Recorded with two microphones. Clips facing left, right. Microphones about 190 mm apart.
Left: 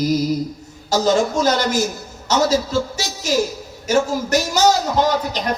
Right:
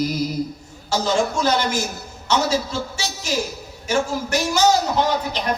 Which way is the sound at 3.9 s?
40° left (ahead or behind).